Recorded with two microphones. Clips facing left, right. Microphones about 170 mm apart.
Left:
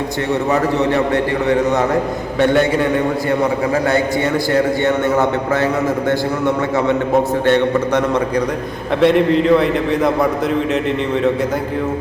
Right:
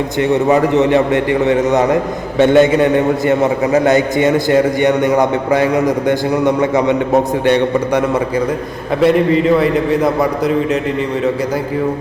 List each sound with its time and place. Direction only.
0.5 s a man's voice: 20° right (ahead or behind)
9.0 s a man's voice: 5° right (ahead or behind)